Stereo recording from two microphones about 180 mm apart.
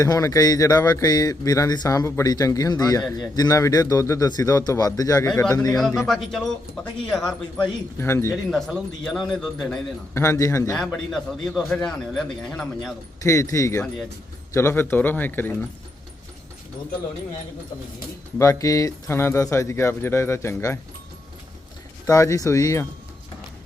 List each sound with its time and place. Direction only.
0.0 s speech: 20° left (ahead or behind)
5.3 s a man's voice: 5° left (ahead or behind)
7.9 s speech: 15° left (ahead or behind)
8.4 s a man's voice: centre (ahead or behind)
10.2 s speech: 15° left (ahead or behind)
10.8 s a man's voice: centre (ahead or behind)
13.2 s speech: 15° left (ahead or behind)
18.3 s speech: 15° left (ahead or behind)
22.0 s speech: 15° left (ahead or behind)